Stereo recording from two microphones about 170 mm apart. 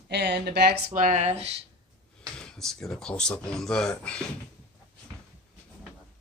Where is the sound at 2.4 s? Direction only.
5° left (ahead or behind).